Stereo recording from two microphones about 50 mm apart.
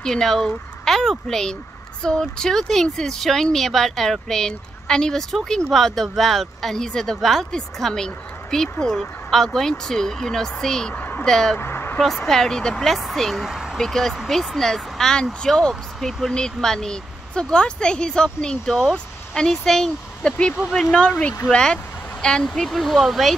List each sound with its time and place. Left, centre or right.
0.0 s speech: centre
11.0 s a sound: left
11.2 s speech: centre
11.5 s a sound: left
12.0 s speech: centre
13.7 s speech: centre
16.0 s speech: centre
20.2 s speech: centre
22.4 s speech: centre